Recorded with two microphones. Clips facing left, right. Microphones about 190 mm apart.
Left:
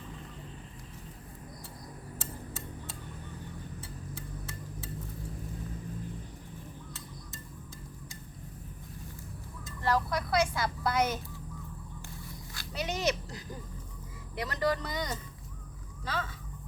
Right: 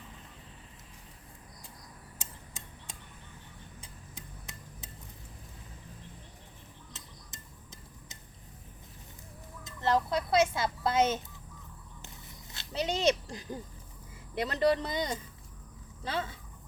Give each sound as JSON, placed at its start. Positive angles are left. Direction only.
{"t": 2.1, "sound": "tick-tock", "side_deg": -15}
{"t": 3.8, "sound": "a sound", "side_deg": -15}
{"t": 9.6, "sound": "speech", "side_deg": -20}
{"t": 12.5, "sound": "speech", "side_deg": -25}